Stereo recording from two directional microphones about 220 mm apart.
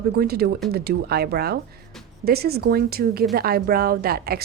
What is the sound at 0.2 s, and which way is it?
Speech, 45° right (ahead or behind).